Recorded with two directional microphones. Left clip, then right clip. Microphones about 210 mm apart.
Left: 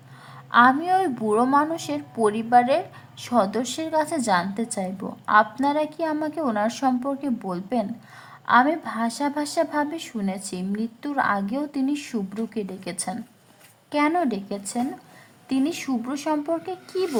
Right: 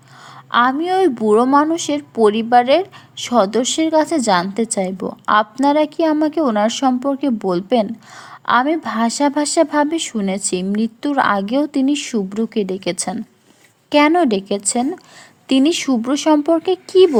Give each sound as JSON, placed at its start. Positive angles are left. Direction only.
{"t": 0.5, "sound": "a woman's voice", "side_deg": -25}